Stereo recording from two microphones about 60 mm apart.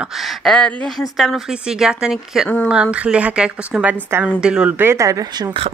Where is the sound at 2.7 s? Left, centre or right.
Centre.